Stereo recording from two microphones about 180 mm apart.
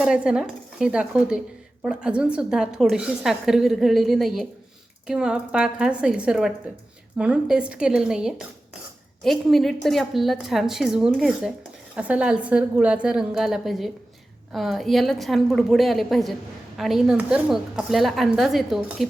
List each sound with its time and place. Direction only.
0.0 s a woman's voice: 5° right (ahead or behind)